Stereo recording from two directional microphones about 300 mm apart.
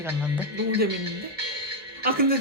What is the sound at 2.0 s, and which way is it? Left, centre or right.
Music, right.